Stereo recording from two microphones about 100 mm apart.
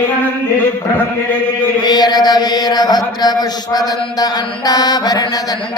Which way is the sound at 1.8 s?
45° left (ahead or behind).